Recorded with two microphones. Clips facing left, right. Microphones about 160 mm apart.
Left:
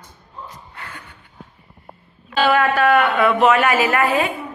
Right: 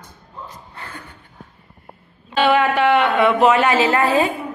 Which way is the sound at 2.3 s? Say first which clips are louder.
Right 1 dB; 20° right (ahead or behind).